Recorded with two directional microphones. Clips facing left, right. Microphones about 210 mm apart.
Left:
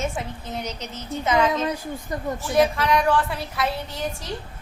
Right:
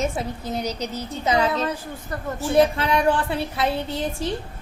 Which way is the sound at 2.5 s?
25° right (ahead or behind).